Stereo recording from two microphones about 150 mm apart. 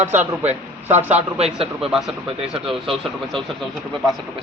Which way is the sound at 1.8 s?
Centre (ahead or behind).